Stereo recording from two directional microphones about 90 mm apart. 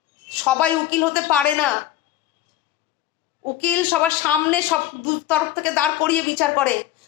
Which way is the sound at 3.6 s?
15° left (ahead or behind).